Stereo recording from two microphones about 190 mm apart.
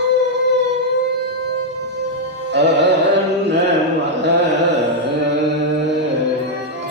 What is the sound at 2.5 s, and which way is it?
Music, 65° right (ahead or behind).